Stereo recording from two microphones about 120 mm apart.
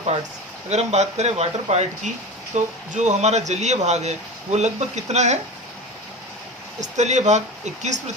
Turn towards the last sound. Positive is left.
turn(degrees=-75)  # may be behind; listen again after turning